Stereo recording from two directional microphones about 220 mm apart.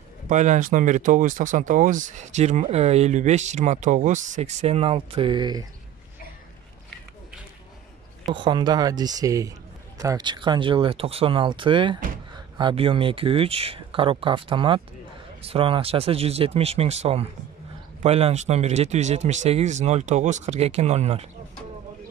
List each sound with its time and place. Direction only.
0.3 s speech: 35° right (ahead or behind)
8.3 s speech: 20° right (ahead or behind)